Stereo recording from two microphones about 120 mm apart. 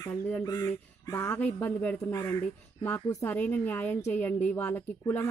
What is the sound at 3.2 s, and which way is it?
Speech, 15° left (ahead or behind).